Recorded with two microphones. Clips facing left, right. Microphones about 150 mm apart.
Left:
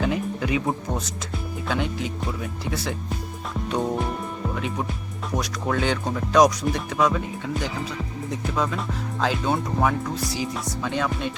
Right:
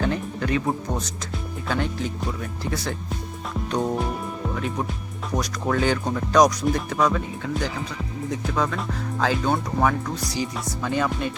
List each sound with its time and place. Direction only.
0.0 s speech: 5° left (ahead or behind)
3.5 s music: centre (ahead or behind)
5.3 s speech: centre (ahead or behind)